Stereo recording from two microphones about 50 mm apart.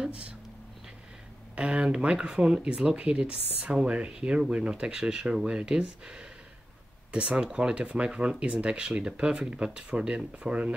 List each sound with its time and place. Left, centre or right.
1.5 s speech: right